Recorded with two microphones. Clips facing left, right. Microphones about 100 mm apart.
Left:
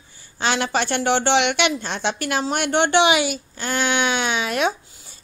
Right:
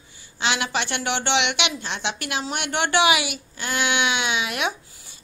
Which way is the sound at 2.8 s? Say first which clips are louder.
Left 1 dB; 25° left (ahead or behind).